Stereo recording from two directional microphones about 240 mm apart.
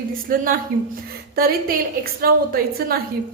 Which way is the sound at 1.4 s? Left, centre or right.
Right.